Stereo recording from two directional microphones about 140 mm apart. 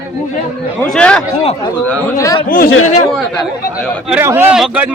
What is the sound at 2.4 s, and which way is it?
Speech, 90° left.